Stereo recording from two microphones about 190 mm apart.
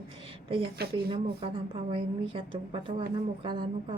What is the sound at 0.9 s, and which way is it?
A woman's voice, 25° right (ahead or behind).